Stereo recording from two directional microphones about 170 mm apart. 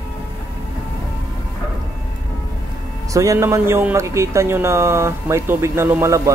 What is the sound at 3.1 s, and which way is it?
A man's voice, 20° right (ahead or behind).